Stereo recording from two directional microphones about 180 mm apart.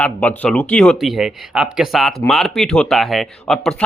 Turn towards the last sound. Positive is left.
turn(degrees=0)  # may be behind; listen again after turning